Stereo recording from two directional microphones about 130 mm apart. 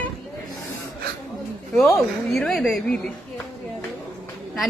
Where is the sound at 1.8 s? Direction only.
Centre (ahead or behind).